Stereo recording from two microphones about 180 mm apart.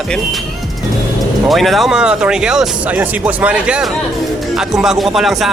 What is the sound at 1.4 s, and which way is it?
Speech, centre (ahead or behind).